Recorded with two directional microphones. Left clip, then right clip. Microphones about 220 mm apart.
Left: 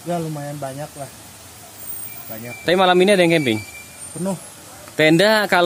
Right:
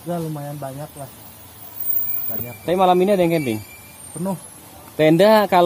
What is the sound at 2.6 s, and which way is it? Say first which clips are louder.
Speech: left 2 dB; 15° left (ahead or behind).